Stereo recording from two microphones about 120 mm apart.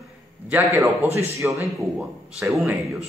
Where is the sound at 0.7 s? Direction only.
20° right (ahead or behind).